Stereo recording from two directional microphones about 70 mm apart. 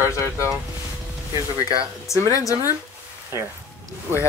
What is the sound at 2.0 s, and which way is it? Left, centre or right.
Speech, left.